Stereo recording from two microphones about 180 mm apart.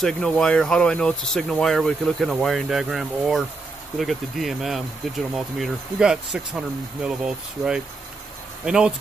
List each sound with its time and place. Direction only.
0.0 s speech: 5° left (ahead or behind)